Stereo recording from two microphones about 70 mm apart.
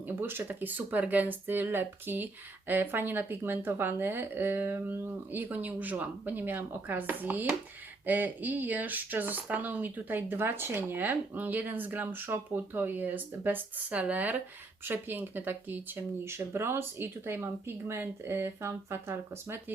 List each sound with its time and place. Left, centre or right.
0.2 s speech: right